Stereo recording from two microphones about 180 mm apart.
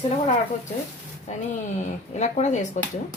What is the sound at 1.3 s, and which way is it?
A woman's voice, 40° left (ahead or behind).